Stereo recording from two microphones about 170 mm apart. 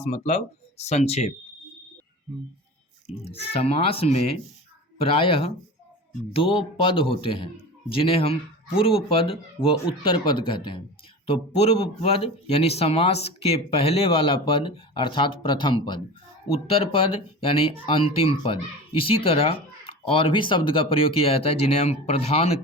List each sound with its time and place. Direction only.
0.0 s speech: 40° left (ahead or behind)
3.2 s speech: 35° left (ahead or behind)